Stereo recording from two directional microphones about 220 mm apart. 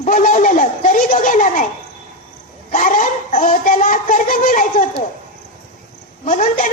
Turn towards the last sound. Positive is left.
turn(degrees=35)  # may be behind; listen again after turning